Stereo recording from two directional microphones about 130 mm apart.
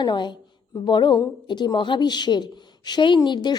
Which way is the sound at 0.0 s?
35° left (ahead or behind).